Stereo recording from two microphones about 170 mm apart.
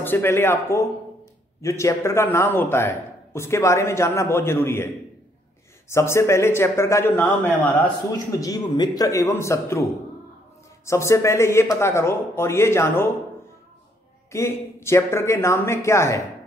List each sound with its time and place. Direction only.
0.0 s a man's voice: 15° left (ahead or behind)
8.4 s a man's voice: 25° left (ahead or behind)
10.9 s a man's voice: 15° left (ahead or behind)
14.3 s a man's voice: 15° left (ahead or behind)